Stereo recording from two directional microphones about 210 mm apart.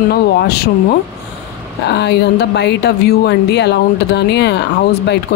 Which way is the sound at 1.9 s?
55° left (ahead or behind).